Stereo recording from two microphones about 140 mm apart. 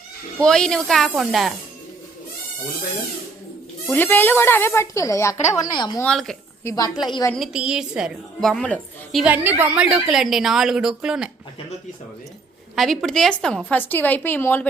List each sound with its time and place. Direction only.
0.3 s a woman's voice: 5° left (ahead or behind)
3.8 s a woman's voice: 15° left (ahead or behind); by 6.0 s 30° left (ahead or behind)
6.0 s a woman's voice: 5° left (ahead or behind)
6.7 s a woman's voice: 25° left (ahead or behind)
7.3 s a woman's voice: 5° right (ahead or behind)
9.2 s a woman's voice: 15° right (ahead or behind)
12.7 s a woman's voice: centre (ahead or behind)